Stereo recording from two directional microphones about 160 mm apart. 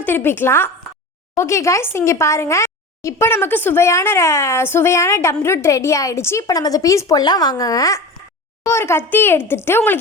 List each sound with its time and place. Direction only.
0.0 s speech: 15° left (ahead or behind)